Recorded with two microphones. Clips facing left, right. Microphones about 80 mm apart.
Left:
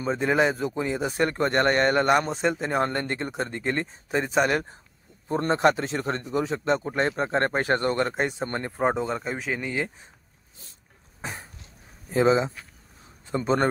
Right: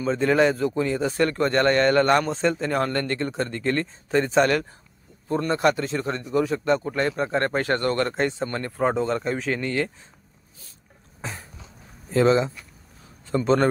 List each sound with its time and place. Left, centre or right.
0.0 s speech: centre
5.4 s speech: left
6.3 s speech: left
12.1 s speech: centre